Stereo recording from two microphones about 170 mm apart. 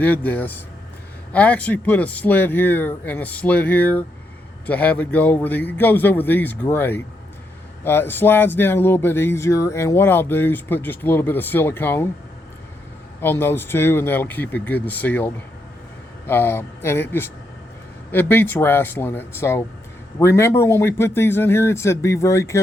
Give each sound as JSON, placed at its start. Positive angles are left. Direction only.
{"t": 0.0, "sound": "speech", "side_deg": 10}
{"t": 13.2, "sound": "speech", "side_deg": 15}